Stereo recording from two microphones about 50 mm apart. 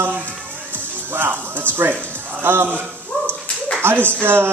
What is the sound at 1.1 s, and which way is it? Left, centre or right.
Speech, right.